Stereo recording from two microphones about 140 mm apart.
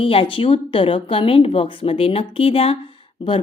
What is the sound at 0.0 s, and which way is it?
Speech, 40° left (ahead or behind).